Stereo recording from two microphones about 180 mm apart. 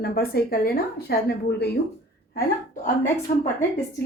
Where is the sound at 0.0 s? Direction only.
55° left (ahead or behind).